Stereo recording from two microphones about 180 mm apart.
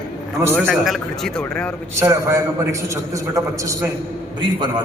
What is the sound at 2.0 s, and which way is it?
A man's voice, 15° right (ahead or behind).